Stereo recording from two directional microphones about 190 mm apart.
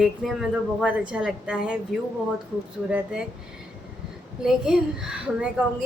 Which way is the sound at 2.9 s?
5° right (ahead or behind).